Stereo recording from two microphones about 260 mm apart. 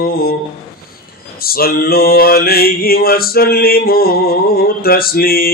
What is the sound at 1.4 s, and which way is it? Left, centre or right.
Mantra, left.